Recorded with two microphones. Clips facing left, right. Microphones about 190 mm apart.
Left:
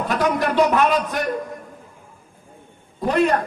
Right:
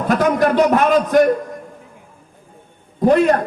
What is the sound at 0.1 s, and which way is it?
A man's voice, 45° right (ahead or behind).